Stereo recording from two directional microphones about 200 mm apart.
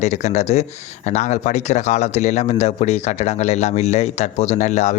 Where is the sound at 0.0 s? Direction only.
35° left (ahead or behind).